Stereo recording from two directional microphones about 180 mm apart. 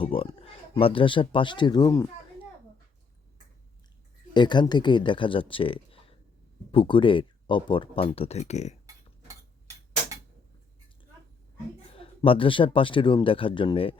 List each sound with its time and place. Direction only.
0.0 s speech: 30° left (ahead or behind)
4.4 s speech: 25° left (ahead or behind)
11.9 s speech: 30° left (ahead or behind)